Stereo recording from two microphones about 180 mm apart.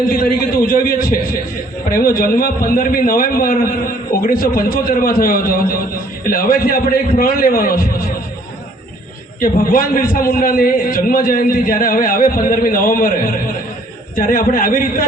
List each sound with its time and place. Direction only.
0.1 s a sound: 50° left (ahead or behind)
1.9 s a man's voice: 55° left (ahead or behind)
9.4 s a man's voice: 50° left (ahead or behind)